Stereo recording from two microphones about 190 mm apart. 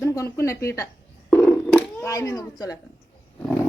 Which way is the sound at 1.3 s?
10° left (ahead or behind).